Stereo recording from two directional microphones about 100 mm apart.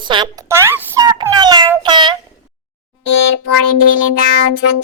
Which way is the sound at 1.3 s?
45° right (ahead or behind).